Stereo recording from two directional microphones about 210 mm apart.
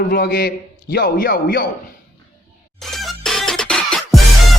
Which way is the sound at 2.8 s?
Centre (ahead or behind).